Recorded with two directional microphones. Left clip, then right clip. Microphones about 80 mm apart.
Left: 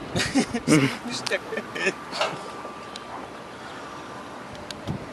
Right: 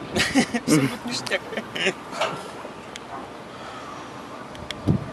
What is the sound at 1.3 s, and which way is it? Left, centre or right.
Speech, right.